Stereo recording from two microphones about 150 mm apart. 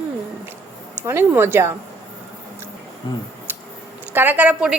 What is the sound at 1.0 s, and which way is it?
Speech, 15° right (ahead or behind).